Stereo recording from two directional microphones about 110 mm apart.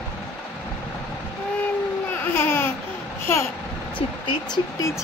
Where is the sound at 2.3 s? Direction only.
20° left (ahead or behind).